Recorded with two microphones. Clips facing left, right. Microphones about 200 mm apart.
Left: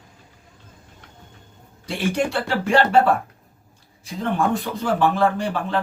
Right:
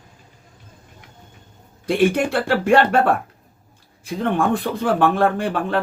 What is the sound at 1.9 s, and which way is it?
Speech, 55° right (ahead or behind).